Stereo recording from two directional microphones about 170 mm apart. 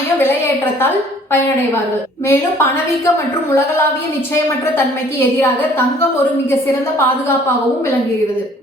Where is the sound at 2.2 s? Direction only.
15° left (ahead or behind).